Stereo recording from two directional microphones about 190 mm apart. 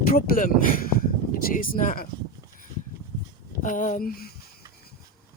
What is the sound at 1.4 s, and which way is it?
Speech, 50° left (ahead or behind).